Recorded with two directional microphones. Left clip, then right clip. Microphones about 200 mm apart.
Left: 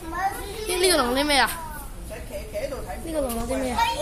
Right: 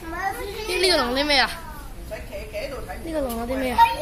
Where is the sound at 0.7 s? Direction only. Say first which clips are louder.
Right 1 dB; 5° left (ahead or behind).